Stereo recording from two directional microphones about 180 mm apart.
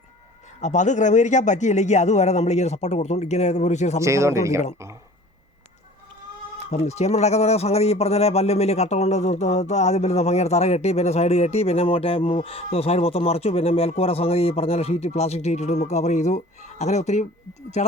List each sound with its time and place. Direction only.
0.6 s speech: 40° left (ahead or behind)
4.0 s speech: 15° right (ahead or behind)
6.7 s speech: 35° left (ahead or behind)